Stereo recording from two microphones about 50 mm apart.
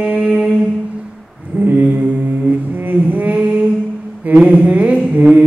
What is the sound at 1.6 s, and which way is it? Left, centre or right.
Mantra, right.